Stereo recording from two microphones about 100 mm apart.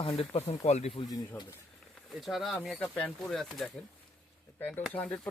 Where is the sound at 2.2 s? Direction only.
Centre (ahead or behind).